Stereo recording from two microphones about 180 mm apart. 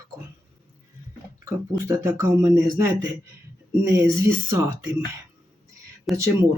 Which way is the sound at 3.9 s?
15° right (ahead or behind).